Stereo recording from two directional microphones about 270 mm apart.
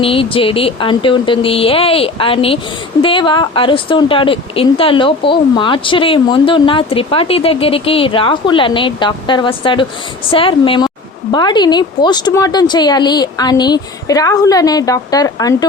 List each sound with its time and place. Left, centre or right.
0.0 s a woman's voice: centre